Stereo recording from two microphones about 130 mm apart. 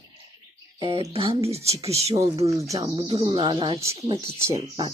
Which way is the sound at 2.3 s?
25° right (ahead or behind).